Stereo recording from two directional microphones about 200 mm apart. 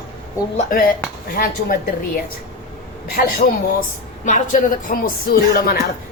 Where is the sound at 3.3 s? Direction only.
45° left (ahead or behind).